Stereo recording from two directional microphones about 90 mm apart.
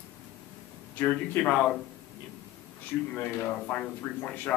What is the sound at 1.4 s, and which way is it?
Speech, 20° left (ahead or behind).